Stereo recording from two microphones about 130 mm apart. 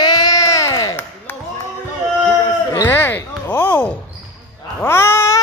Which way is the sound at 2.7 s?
20° left (ahead or behind).